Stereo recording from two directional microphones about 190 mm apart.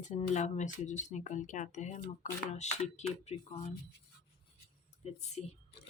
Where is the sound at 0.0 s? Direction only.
40° left (ahead or behind).